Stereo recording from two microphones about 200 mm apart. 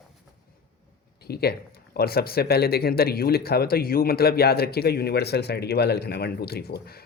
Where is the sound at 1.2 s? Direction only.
50° left (ahead or behind).